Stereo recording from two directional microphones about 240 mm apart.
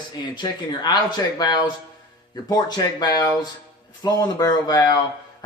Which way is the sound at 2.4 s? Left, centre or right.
Centre.